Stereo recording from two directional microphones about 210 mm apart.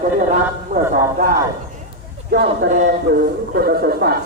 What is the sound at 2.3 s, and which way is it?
Speech, 50° right (ahead or behind).